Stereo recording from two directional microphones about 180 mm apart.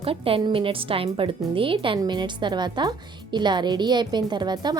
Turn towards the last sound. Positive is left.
turn(degrees=-25)  # may be behind; listen again after turning